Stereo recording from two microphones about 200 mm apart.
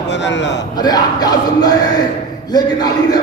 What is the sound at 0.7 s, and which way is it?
Speech, 20° left (ahead or behind).